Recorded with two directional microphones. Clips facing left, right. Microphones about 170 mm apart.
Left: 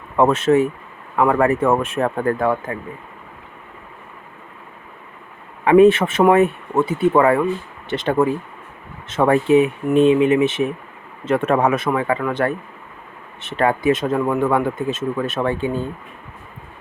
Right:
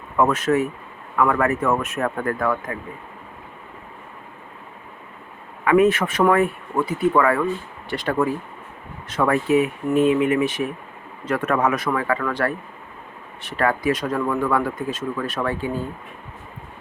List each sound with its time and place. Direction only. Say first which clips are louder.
0.2 s speech: left 4 dB; 25° left (ahead or behind)
5.6 s speech: left 5 dB; 30° left (ahead or behind)